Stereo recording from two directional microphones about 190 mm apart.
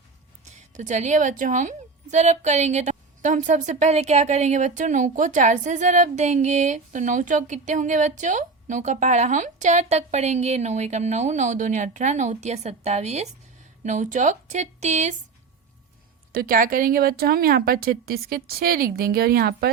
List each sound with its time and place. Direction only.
0.5 s a woman's voice: 40° right (ahead or behind)
16.3 s speech: 50° right (ahead or behind)